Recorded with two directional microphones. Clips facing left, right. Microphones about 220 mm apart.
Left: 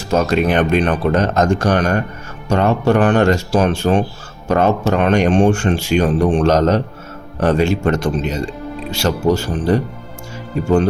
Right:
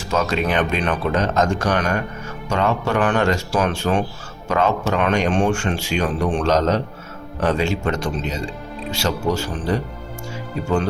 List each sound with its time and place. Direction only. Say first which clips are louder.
0.1 s speech: left 5 dB; 50° left (ahead or behind); by 4.0 s 35° left (ahead or behind)
4.4 s speech: left 5 dB; 50° left (ahead or behind)
4.9 s speech: left 5 dB; 40° left (ahead or behind)
6.4 s speech: left 4 dB; 55° left (ahead or behind)